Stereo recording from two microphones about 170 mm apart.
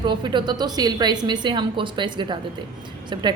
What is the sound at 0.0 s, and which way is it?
A woman's voice, 25° right (ahead or behind).